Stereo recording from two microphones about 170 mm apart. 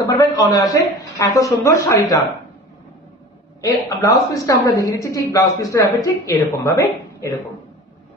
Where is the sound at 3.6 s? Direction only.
20° left (ahead or behind).